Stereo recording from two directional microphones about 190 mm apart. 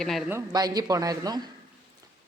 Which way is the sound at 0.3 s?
15° right (ahead or behind).